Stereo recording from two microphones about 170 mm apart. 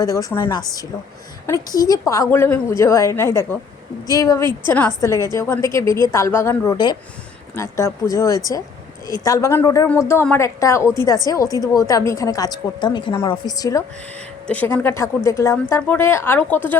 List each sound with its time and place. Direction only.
0.0 s a woman's voice: 20° left (ahead or behind)
14.4 s a woman's voice: 10° left (ahead or behind)